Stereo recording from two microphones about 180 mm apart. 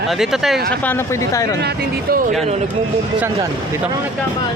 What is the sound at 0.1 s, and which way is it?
Speech, centre (ahead or behind).